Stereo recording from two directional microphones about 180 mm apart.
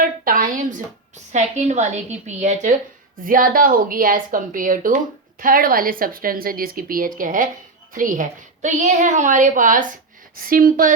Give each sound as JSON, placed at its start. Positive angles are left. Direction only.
{"t": 0.0, "sound": "a woman's voice", "side_deg": -50}